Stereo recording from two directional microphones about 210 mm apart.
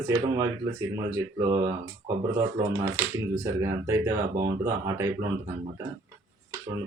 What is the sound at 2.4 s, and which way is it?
Speech, 15° right (ahead or behind).